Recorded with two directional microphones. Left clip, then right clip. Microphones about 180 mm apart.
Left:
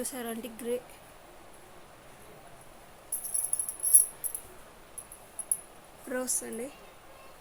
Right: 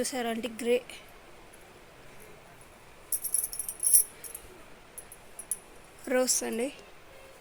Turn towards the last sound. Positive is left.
turn(degrees=-30)  # may be behind; listen again after turning